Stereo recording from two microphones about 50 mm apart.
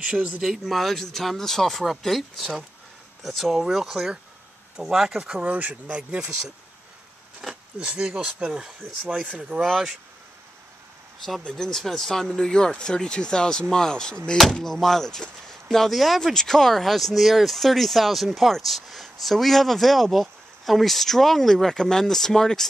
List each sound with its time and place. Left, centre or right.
0.4 s speech: centre
5.4 s speech: right
5.9 s speech: right
7.4 s a sound: centre
7.8 s speech: right
9.6 s speech: centre
11.2 s speech: centre